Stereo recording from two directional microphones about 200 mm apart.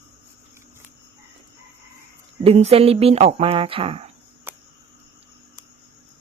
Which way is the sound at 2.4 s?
30° right (ahead or behind).